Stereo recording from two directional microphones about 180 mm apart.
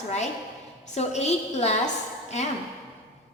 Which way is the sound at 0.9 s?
35° left (ahead or behind).